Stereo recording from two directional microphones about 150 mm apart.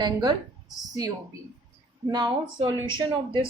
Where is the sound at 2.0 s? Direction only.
30° right (ahead or behind).